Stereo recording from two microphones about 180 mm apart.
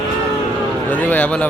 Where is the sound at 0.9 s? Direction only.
10° left (ahead or behind).